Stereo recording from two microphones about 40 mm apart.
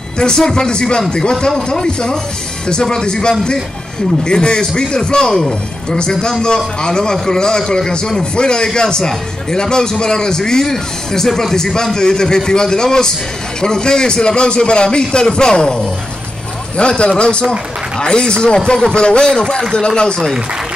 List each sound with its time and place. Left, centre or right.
0.2 s a man's voice: centre